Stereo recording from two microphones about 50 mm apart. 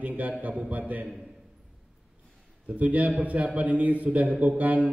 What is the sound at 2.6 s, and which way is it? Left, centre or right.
A man's voice, right.